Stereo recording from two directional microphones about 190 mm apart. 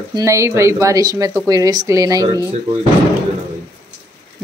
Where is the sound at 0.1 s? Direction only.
15° right (ahead or behind).